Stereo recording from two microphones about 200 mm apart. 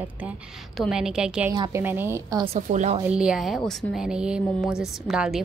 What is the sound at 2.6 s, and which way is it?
Speech, 40° right (ahead or behind).